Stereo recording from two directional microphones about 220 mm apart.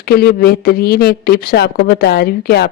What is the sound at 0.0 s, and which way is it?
A man's voice, 45° left (ahead or behind).